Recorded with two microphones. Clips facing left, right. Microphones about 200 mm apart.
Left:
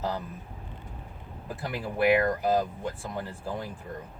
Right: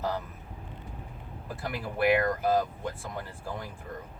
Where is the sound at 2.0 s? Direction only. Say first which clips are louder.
Left 2 dB; 15° left (ahead or behind).